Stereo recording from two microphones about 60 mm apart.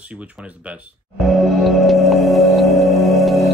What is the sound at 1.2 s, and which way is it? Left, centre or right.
Music, centre.